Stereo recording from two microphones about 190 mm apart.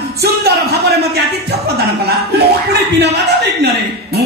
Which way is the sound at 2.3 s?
60° right (ahead or behind).